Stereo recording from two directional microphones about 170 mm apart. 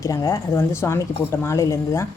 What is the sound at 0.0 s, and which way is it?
Cutlery, 20° left (ahead or behind).